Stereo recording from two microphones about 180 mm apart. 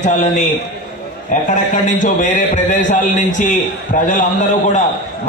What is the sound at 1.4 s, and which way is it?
A man's voice, 45° left (ahead or behind).